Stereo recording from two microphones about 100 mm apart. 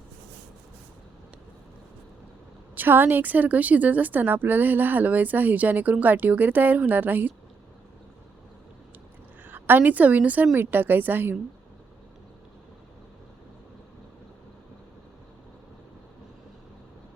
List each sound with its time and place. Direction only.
2.7 s a woman's voice: 20° right (ahead or behind)
9.4 s a woman's voice: 20° right (ahead or behind)